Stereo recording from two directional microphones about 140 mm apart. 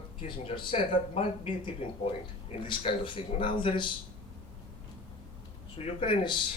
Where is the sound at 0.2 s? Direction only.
40° left (ahead or behind).